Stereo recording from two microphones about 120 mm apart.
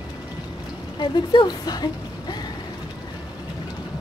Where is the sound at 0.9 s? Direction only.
35° left (ahead or behind).